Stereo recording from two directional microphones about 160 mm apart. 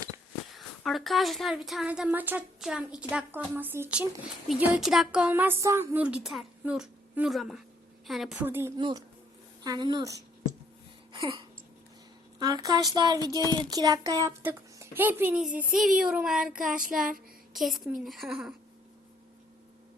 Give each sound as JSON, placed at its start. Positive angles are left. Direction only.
{"t": 0.5, "sound": "a woman's voice", "side_deg": 0}
{"t": 8.4, "sound": "speech", "side_deg": -15}
{"t": 8.8, "sound": "speech", "side_deg": -25}
{"t": 11.1, "sound": "a sound", "side_deg": -30}
{"t": 12.4, "sound": "speech", "side_deg": -25}
{"t": 16.0, "sound": "a sound", "side_deg": -5}
{"t": 16.6, "sound": "child singing", "side_deg": -55}
{"t": 17.5, "sound": "speech", "side_deg": 0}
{"t": 18.0, "sound": "a sound", "side_deg": 0}